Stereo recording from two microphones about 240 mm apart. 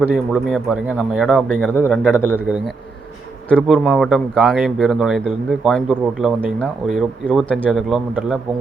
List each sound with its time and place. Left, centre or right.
0.1 s speech: centre
2.3 s speech: centre